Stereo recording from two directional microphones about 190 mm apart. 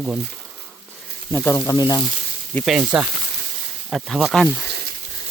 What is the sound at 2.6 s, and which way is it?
Speech, 5° right (ahead or behind).